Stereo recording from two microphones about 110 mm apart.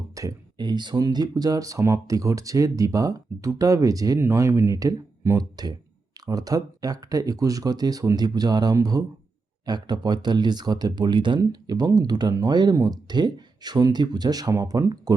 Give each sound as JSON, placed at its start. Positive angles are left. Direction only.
{"t": 0.2, "sound": "speech", "side_deg": -35}